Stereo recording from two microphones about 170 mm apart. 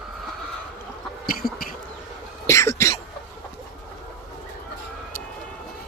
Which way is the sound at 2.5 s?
15° left (ahead or behind).